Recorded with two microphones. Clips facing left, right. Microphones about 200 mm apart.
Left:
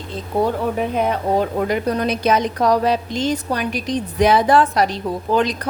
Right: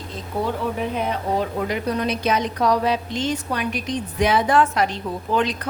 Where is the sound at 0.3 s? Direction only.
35° left (ahead or behind).